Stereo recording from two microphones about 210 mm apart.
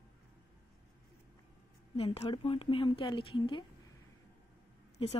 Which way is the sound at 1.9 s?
30° left (ahead or behind).